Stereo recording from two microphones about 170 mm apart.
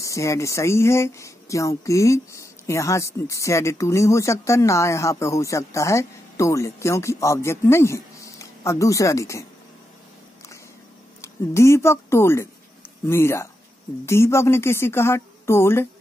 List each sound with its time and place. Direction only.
0.0 s speech: 20° left (ahead or behind)
11.1 s speech: 15° left (ahead or behind)